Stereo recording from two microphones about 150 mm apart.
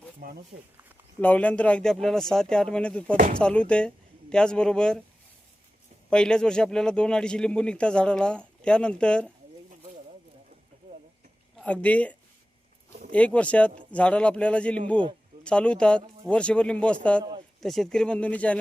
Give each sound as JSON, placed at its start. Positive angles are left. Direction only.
{"t": 0.2, "sound": "speech", "side_deg": -85}
{"t": 1.2, "sound": "a man's voice", "side_deg": 10}
{"t": 6.1, "sound": "a man's voice", "side_deg": 5}
{"t": 11.5, "sound": "a man's voice", "side_deg": 10}